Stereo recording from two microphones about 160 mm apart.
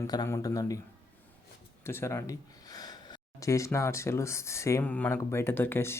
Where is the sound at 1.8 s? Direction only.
15° left (ahead or behind).